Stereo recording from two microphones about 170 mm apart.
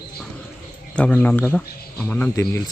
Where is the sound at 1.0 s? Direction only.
5° left (ahead or behind).